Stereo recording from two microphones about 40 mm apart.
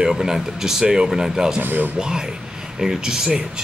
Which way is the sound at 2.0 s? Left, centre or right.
Centre.